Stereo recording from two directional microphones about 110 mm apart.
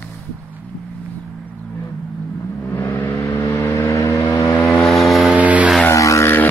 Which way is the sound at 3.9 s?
30° left (ahead or behind).